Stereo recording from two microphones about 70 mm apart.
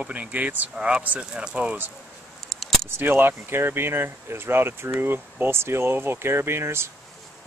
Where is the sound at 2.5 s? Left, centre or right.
Centre.